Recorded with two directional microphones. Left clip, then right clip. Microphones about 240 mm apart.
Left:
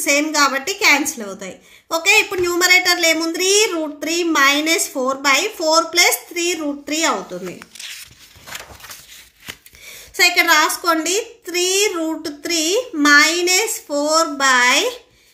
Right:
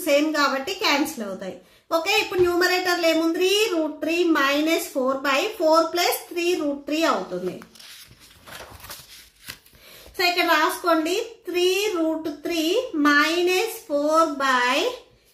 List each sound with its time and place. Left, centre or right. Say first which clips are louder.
0.0 s a woman's voice: left 4 dB; left
10.1 s a woman's voice: left 7 dB; left